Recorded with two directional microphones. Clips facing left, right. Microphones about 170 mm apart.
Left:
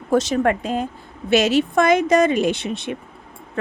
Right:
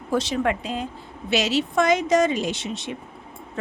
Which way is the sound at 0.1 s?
50° left (ahead or behind).